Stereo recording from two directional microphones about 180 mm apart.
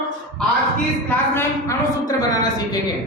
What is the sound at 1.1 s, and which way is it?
Speech, 15° left (ahead or behind).